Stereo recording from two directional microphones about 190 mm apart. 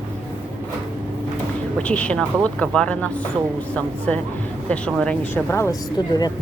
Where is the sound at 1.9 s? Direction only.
5° left (ahead or behind).